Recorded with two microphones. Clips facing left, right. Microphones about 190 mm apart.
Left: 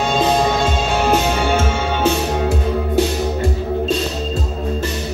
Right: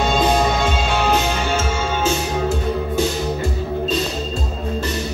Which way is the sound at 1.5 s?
60° left (ahead or behind).